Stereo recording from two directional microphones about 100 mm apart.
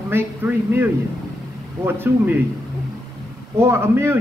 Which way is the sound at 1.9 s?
20° right (ahead or behind).